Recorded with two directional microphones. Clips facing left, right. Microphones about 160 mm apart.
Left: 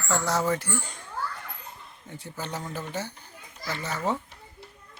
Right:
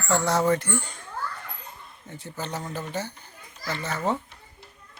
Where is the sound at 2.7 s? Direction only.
10° left (ahead or behind).